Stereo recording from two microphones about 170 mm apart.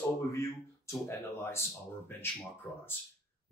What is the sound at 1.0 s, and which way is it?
Speech, 15° left (ahead or behind).